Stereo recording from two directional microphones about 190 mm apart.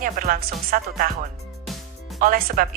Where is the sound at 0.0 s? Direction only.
45° right (ahead or behind).